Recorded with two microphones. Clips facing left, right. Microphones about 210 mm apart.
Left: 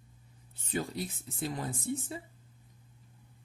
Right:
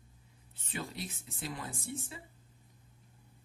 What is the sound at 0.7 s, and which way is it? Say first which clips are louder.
Speech: left 6 dB; 40° left (ahead or behind).